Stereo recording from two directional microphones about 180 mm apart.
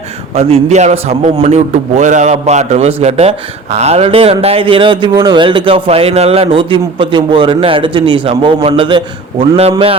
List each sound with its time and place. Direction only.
0.3 s a man's voice: 35° right (ahead or behind)